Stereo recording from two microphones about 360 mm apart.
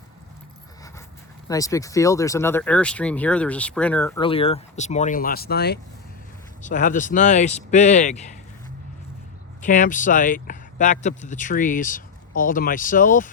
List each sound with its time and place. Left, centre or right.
1.5 s speech: centre
9.6 s speech: left